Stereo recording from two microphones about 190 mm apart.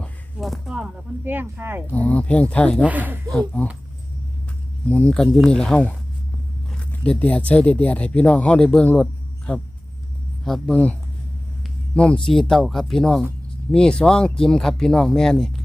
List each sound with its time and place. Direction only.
0.0 s speech: centre (ahead or behind)
2.0 s speech: 10° left (ahead or behind)
2.8 s speech: 10° right (ahead or behind)
3.3 s speech: 10° left (ahead or behind)
4.9 s speech: 5° left (ahead or behind)
11.9 s speech: 5° left (ahead or behind)